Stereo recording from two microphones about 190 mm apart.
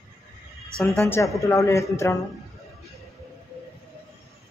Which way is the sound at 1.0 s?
15° left (ahead or behind).